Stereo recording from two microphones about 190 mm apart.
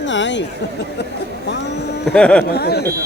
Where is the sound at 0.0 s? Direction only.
75° left (ahead or behind).